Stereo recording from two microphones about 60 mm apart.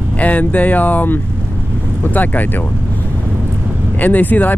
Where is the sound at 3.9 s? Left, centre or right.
Left.